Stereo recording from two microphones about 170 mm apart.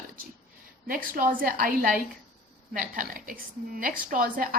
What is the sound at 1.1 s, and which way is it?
A woman's voice, 55° right (ahead or behind).